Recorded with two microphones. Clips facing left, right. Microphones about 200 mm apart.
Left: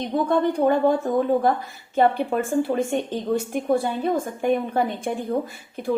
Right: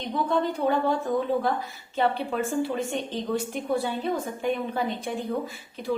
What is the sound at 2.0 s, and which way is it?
A woman's voice, 50° left (ahead or behind).